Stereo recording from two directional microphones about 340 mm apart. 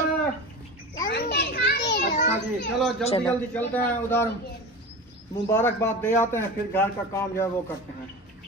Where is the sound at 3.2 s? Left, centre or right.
Centre.